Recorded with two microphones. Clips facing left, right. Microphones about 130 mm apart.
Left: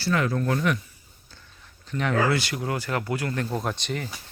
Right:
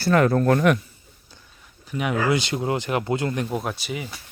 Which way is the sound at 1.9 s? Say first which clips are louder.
Right 1 dB; 10° right (ahead or behind).